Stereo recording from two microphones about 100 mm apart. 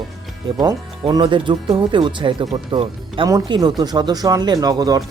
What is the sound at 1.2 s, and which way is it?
Speech, 55° right (ahead or behind).